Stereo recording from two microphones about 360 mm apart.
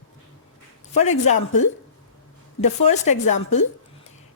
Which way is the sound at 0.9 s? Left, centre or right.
Centre.